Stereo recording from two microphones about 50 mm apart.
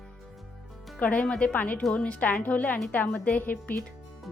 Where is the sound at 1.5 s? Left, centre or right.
Left.